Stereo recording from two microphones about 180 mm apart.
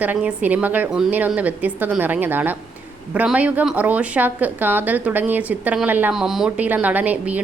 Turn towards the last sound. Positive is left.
turn(degrees=-10)  # may be behind; listen again after turning